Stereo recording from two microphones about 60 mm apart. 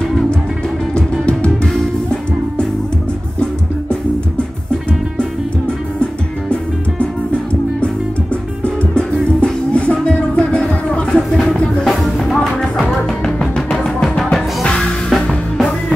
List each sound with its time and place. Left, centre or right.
0.9 s music: centre
9.4 s music: centre
11.1 s music: centre